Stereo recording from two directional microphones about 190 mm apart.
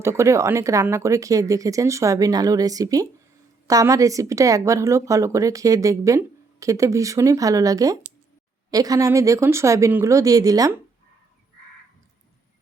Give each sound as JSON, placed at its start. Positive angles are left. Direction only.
{"t": 0.0, "sound": "a woman's voice", "side_deg": -15}